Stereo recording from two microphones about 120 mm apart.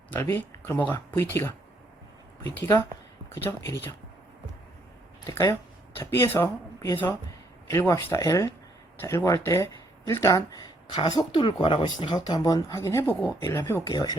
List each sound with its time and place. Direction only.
0.1 s speech: 20° left (ahead or behind)
2.6 s speech: 25° left (ahead or behind)
5.2 s speech: 30° left (ahead or behind)